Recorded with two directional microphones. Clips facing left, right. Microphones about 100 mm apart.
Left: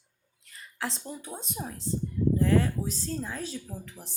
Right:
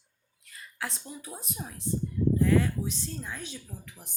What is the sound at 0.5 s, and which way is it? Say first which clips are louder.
Speech: left 3 dB; 30° left (ahead or behind).